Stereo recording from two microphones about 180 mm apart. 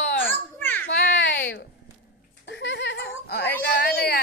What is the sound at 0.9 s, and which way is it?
Baby cry, 75° left (ahead or behind).